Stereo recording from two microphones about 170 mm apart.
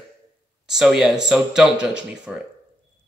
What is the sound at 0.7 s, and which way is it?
Speech, centre (ahead or behind).